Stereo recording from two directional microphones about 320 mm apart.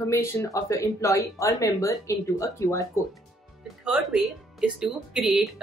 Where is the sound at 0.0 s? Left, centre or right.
Centre.